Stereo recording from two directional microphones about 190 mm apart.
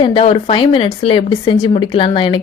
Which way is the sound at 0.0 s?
30° left (ahead or behind).